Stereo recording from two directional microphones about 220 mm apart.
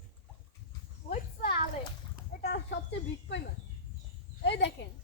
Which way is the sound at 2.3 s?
40° left (ahead or behind).